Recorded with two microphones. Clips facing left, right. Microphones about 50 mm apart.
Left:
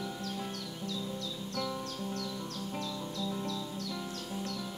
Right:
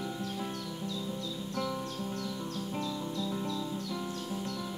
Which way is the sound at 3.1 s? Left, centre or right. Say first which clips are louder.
Left 1 dB; centre.